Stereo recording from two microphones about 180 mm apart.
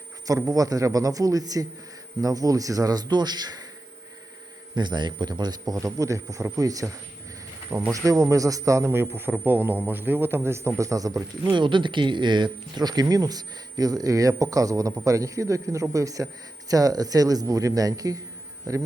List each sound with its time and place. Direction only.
0.3 s a man's voice: 20° right (ahead or behind)
4.7 s a man's voice: 25° right (ahead or behind)